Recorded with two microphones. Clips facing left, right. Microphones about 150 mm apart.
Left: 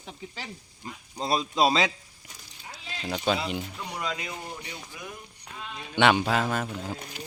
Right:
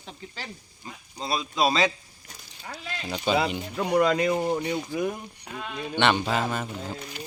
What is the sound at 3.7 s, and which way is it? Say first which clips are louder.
Speech: right 12 dB; 60° right (ahead or behind).